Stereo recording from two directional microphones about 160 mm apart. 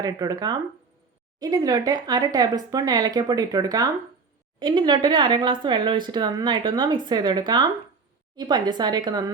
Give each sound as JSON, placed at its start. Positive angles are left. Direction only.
{"t": 0.0, "sound": "speech", "side_deg": -25}